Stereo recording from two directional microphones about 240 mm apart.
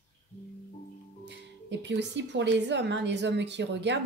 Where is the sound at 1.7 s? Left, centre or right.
Right.